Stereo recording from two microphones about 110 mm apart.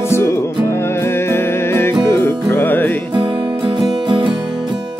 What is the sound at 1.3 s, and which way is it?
Music, 20° left (ahead or behind).